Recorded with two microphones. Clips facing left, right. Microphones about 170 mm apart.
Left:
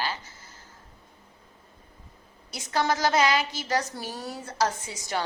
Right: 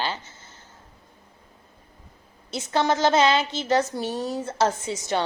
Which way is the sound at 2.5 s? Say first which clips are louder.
Right 4 dB; 25° right (ahead or behind).